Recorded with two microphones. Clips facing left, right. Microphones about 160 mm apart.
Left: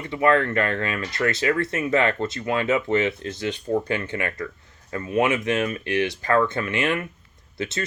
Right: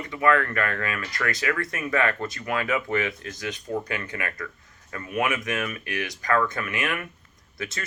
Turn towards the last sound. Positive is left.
turn(degrees=30)  # may be behind; listen again after turning